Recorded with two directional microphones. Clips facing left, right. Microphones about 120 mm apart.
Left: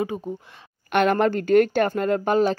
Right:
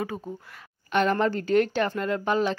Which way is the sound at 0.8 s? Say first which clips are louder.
Left 4 dB; 65° left (ahead or behind).